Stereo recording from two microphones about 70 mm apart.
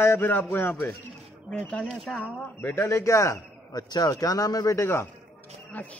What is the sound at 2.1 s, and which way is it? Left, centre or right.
Speech, left.